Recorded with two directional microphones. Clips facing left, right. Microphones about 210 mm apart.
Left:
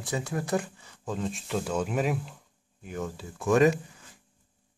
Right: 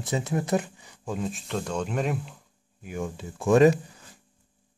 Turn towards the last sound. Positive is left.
turn(degrees=-35)  # may be behind; listen again after turning